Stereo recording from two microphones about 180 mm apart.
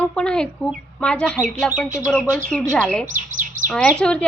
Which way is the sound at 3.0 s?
45° right (ahead or behind).